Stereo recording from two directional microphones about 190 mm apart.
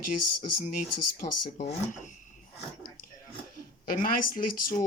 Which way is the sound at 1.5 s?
45° left (ahead or behind).